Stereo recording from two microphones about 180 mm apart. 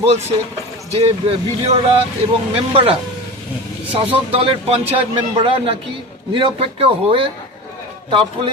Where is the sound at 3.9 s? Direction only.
35° right (ahead or behind).